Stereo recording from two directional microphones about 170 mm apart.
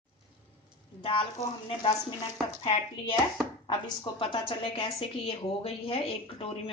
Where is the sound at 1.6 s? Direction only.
25° left (ahead or behind).